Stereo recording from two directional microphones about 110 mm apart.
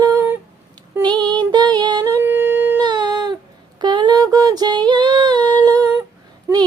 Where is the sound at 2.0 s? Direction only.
20° right (ahead or behind).